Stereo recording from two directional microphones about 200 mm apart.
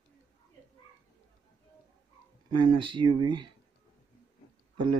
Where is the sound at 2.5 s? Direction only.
25° right (ahead or behind).